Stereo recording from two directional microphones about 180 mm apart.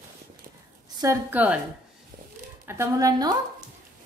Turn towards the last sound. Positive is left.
turn(degrees=-20)  # may be behind; listen again after turning